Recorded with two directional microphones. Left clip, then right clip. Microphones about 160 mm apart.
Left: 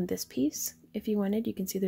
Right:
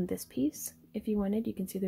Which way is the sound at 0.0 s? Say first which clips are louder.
Left 2 dB; 5° left (ahead or behind).